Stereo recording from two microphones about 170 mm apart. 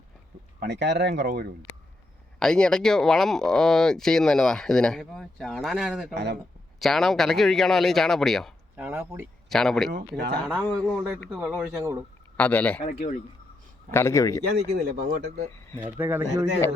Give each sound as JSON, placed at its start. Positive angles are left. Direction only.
{"t": 0.6, "sound": "speech", "side_deg": -85}
{"t": 2.4, "sound": "speech", "side_deg": 5}
{"t": 6.1, "sound": "speech", "side_deg": -75}
{"t": 6.7, "sound": "speech", "side_deg": 0}
{"t": 8.7, "sound": "speech", "side_deg": -10}
{"t": 9.5, "sound": "speech", "side_deg": 0}
{"t": 12.4, "sound": "speech", "side_deg": 10}
{"t": 12.8, "sound": "speech", "side_deg": 45}
{"t": 13.9, "sound": "speech", "side_deg": 15}
{"t": 14.5, "sound": "speech", "side_deg": -70}
{"t": 15.8, "sound": "speech", "side_deg": -10}